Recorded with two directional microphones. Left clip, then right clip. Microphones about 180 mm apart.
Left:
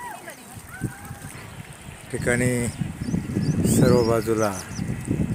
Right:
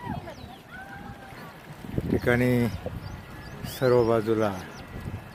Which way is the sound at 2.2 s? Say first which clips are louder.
Left 2 dB; 5° left (ahead or behind).